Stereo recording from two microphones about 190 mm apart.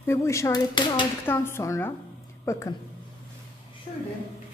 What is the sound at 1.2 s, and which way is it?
Speech, 10° left (ahead or behind).